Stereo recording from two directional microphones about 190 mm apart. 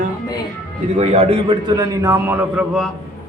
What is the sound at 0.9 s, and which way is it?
Speech, 35° right (ahead or behind).